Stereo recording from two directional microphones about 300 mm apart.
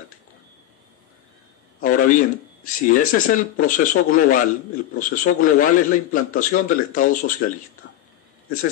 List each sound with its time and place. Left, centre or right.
1.8 s a man's voice: left